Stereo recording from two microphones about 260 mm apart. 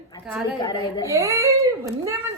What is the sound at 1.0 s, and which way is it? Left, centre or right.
A woman's voice, centre.